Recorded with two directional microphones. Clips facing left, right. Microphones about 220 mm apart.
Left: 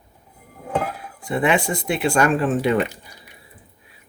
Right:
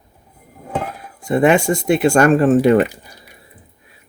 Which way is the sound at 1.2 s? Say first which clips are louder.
Right 6 dB; 45° right (ahead or behind).